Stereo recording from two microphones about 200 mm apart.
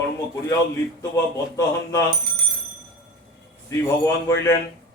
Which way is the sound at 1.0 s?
15° left (ahead or behind).